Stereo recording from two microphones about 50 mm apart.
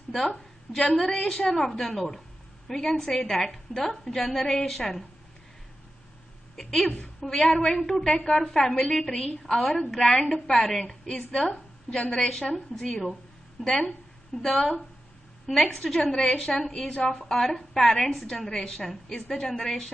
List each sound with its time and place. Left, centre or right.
0.7 s a woman's voice: centre
6.5 s a woman's voice: centre
13.0 s a sound: centre
14.4 s a woman's voice: centre
15.7 s a woman's voice: centre